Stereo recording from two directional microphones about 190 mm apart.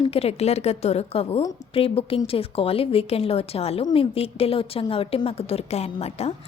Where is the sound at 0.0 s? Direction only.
30° left (ahead or behind).